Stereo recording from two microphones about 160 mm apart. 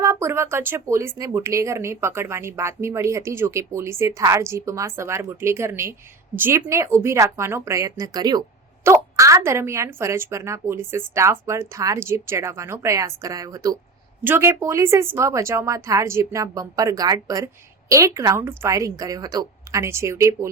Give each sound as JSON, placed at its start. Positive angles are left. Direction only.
{"t": 0.0, "sound": "a woman's voice", "side_deg": -20}